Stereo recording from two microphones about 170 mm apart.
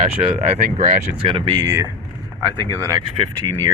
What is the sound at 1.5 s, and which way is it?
Speech, 20° right (ahead or behind).